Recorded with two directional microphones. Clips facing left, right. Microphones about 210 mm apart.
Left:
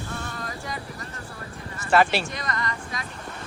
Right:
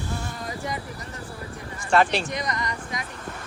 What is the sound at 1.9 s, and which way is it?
Speech, 5° left (ahead or behind).